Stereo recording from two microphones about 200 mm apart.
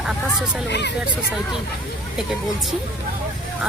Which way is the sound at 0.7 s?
60° left (ahead or behind).